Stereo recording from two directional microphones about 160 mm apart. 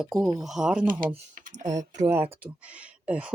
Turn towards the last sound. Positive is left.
turn(degrees=-10)  # may be behind; listen again after turning